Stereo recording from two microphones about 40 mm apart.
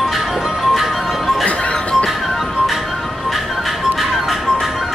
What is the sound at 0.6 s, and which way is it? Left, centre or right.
Music, centre.